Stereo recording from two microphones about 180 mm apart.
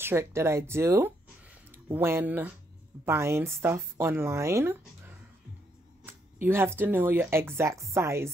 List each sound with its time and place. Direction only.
0.0 s speech: 15° right (ahead or behind)
6.4 s speech: 15° right (ahead or behind)